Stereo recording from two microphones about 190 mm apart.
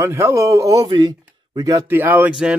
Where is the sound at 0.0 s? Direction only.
15° right (ahead or behind).